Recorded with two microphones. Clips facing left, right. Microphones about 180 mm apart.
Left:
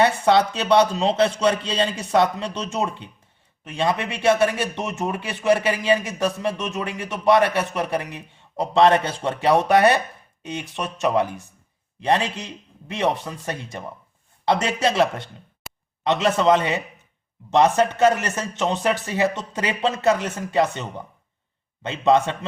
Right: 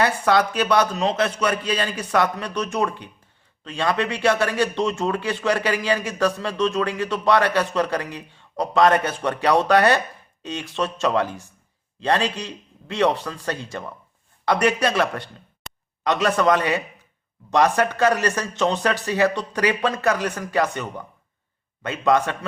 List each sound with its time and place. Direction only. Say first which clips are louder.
0.0 s speech: left 2 dB; 25° left (ahead or behind)
15.6 s a sound: even; 5° left (ahead or behind)
16.0 s speech: left 1 dB; 25° left (ahead or behind)
21.8 s speech: left 1 dB; 25° left (ahead or behind)